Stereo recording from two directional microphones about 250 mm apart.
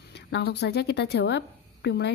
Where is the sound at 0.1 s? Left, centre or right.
Left.